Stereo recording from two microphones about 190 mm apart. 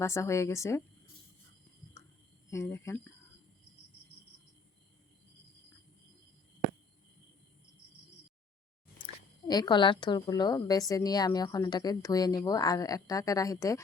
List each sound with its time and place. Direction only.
0.0 s speech: 15° left (ahead or behind)
2.5 s speech: 15° left (ahead or behind)
9.5 s a woman's voice: 25° left (ahead or behind)